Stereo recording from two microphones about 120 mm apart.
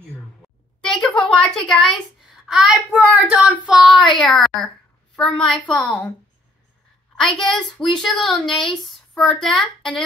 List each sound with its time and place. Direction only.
0.7 s a woman's voice: 5° left (ahead or behind)
7.2 s a woman's voice: 5° left (ahead or behind)